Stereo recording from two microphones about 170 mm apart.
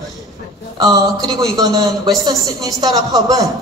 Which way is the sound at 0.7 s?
25° right (ahead or behind).